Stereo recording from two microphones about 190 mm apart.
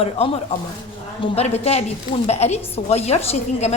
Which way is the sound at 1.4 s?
35° left (ahead or behind).